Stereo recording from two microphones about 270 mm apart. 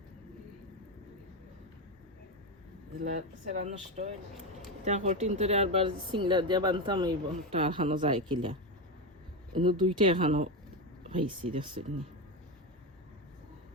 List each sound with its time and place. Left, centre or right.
3.0 s speech: right
9.6 s speech: centre